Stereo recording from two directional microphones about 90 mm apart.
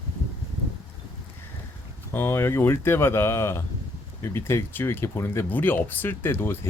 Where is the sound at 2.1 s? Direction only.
25° left (ahead or behind).